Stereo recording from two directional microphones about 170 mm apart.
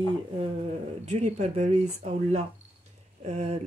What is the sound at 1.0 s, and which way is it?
Speech, 40° right (ahead or behind).